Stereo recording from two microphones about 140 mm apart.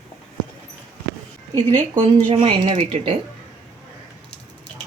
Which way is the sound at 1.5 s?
35° right (ahead or behind).